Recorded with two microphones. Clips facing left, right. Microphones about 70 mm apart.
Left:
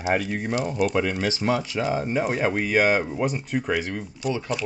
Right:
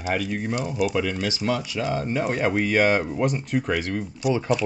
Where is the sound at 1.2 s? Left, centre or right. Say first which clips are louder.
Left 1 dB; left.